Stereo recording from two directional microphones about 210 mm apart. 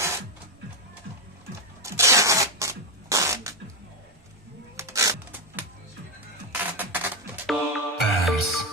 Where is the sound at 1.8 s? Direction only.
15° right (ahead or behind).